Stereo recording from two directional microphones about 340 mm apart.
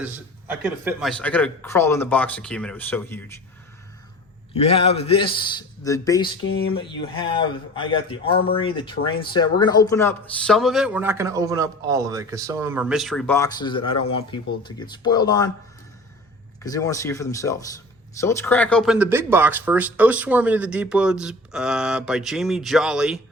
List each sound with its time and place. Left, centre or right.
0.0 s speech: centre
4.5 s a man's voice: centre
16.6 s a man's voice: centre